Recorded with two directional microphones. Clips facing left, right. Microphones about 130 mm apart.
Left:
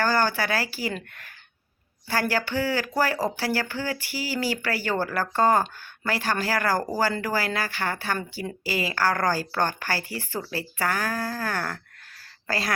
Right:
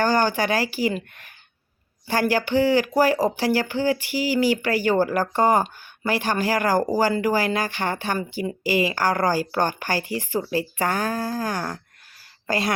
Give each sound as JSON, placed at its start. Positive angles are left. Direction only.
{"t": 0.0, "sound": "speech", "side_deg": -15}
{"t": 2.0, "sound": "speech", "side_deg": -15}